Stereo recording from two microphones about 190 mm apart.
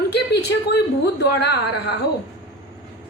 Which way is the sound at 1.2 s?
60° left (ahead or behind).